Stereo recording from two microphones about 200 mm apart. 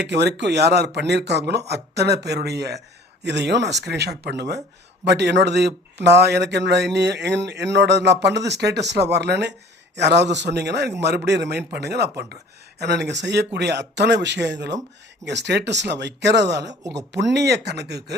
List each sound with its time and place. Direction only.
0.0 s speech: 55° right (ahead or behind)